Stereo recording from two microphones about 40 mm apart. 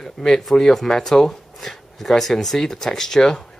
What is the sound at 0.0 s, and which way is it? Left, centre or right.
Speech, centre.